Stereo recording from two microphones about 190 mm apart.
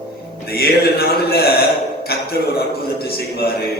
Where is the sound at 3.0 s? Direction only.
55° left (ahead or behind).